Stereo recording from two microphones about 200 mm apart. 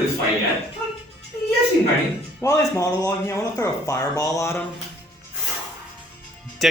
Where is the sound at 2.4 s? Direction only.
15° left (ahead or behind).